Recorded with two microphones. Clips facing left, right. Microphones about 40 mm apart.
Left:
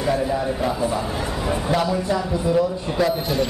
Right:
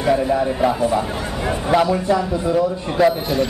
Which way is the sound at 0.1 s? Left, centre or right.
Right.